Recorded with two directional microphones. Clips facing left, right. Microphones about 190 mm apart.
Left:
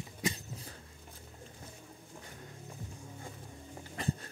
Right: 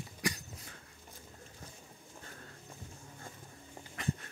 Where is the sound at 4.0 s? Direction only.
30° left (ahead or behind).